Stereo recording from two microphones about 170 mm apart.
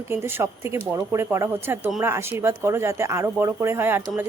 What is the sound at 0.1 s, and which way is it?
Speech, 15° right (ahead or behind).